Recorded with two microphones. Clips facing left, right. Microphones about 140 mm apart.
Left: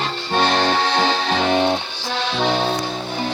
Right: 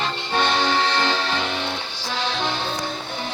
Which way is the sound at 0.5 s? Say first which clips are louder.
Left 3 dB; 65° left (ahead or behind).